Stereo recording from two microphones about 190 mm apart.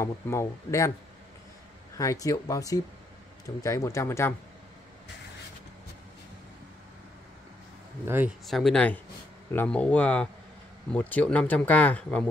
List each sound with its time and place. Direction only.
0.0 s speech: 15° left (ahead or behind)
2.0 s speech: 15° left (ahead or behind)
8.5 s speech: centre (ahead or behind)